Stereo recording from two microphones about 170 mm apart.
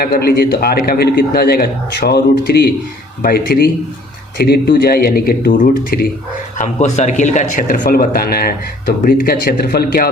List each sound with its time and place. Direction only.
0.0 s speech: 65° left (ahead or behind)
3.2 s speech: 65° left (ahead or behind)
6.6 s speech: 40° left (ahead or behind); by 10.1 s 65° left (ahead or behind)